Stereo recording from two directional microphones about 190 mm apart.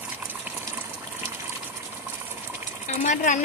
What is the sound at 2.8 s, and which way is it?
Sewing machine, 40° left (ahead or behind).